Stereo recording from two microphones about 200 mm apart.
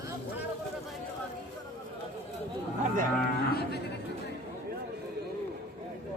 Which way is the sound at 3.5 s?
50° left (ahead or behind).